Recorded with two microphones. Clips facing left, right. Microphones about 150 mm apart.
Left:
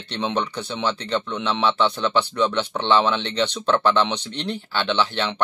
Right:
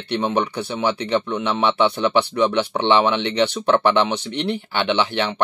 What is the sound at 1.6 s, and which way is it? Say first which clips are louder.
Speech: right 3 dB; 15° right (ahead or behind).